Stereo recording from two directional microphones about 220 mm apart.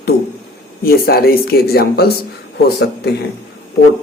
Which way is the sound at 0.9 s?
45° left (ahead or behind).